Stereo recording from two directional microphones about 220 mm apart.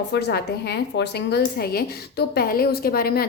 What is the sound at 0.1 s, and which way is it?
A woman's voice, 50° left (ahead or behind).